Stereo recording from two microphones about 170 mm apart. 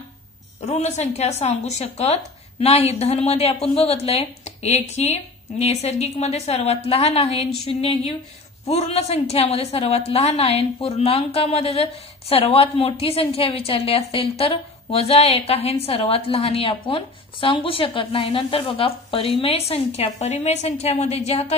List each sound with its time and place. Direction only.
0.7 s a woman's voice: 40° left (ahead or behind)